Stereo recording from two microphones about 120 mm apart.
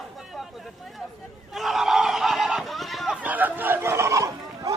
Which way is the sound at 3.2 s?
15° right (ahead or behind).